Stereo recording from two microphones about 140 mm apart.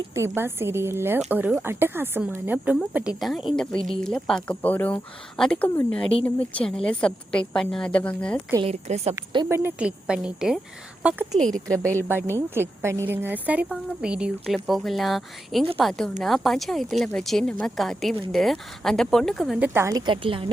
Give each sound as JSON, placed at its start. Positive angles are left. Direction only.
{"t": 0.1, "sound": "a woman's voice", "side_deg": -20}
{"t": 8.6, "sound": "a woman's voice", "side_deg": -50}
{"t": 9.5, "sound": "speech", "side_deg": -10}
{"t": 11.3, "sound": "a woman's voice", "side_deg": 5}
{"t": 12.0, "sound": "a woman's voice", "side_deg": -15}
{"t": 19.5, "sound": "a woman's voice", "side_deg": -15}